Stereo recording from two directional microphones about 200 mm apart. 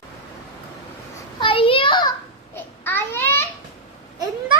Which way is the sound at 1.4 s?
25° left (ahead or behind).